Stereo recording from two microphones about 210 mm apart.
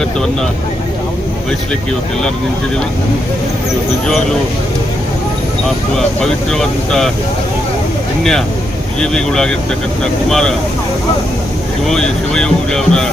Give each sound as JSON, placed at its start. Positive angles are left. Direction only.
{"t": 4.0, "sound": "speech", "side_deg": 0}
{"t": 6.0, "sound": "speech", "side_deg": 0}
{"t": 9.0, "sound": "speech", "side_deg": 5}
{"t": 11.9, "sound": "speech", "side_deg": 5}